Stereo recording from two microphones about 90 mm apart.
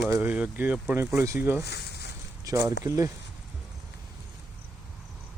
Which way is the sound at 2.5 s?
35° right (ahead or behind).